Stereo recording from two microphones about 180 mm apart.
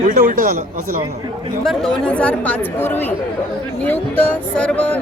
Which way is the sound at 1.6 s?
Centre (ahead or behind).